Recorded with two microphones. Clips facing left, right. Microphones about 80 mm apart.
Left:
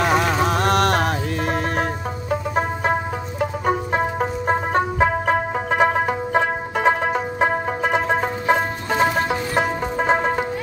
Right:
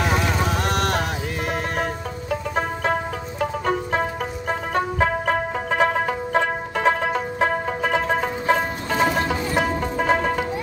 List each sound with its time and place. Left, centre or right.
0.0 s vehicle: left
2.5 s music: centre
4.2 s music: left
4.9 s music: centre